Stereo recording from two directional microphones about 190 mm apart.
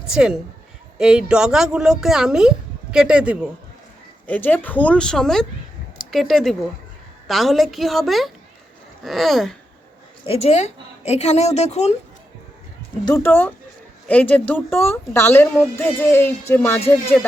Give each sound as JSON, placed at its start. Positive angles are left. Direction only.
{"t": 0.1, "sound": "speech", "side_deg": -5}
{"t": 4.3, "sound": "speech", "side_deg": 10}
{"t": 10.2, "sound": "a woman's voice", "side_deg": 35}
{"t": 13.1, "sound": "speech", "side_deg": 15}